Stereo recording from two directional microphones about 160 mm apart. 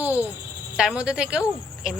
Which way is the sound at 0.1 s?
15° left (ahead or behind).